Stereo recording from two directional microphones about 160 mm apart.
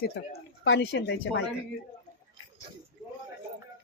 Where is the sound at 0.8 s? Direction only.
90° left.